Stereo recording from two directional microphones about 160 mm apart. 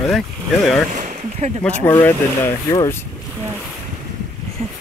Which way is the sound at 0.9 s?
50° right (ahead or behind).